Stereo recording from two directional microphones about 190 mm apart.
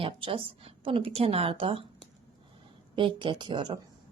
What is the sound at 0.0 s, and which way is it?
A woman's voice, 30° right (ahead or behind).